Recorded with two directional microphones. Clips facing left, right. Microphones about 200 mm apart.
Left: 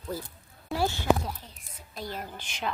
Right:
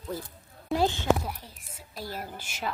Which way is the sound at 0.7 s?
20° right (ahead or behind).